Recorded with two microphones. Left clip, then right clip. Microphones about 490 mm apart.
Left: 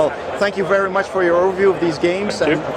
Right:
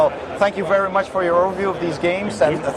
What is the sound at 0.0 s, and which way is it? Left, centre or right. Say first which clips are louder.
Speech: even; right.